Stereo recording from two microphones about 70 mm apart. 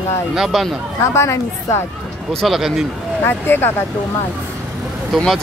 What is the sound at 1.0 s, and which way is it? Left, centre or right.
Speech, left.